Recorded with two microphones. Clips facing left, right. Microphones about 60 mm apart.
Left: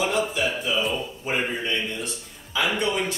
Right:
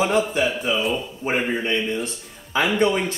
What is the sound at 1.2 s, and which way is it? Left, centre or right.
Speech, right.